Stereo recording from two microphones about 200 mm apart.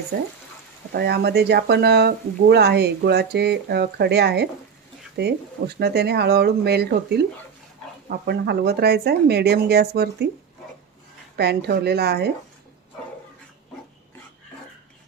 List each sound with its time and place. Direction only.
0.9 s speech: 55° right (ahead or behind)
8.2 s speech: 55° right (ahead or behind)
11.3 s speech: 55° right (ahead or behind)